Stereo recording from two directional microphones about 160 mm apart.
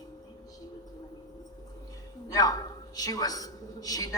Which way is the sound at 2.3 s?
25° left (ahead or behind).